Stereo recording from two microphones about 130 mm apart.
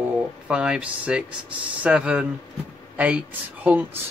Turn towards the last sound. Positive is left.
turn(degrees=-10)  # may be behind; listen again after turning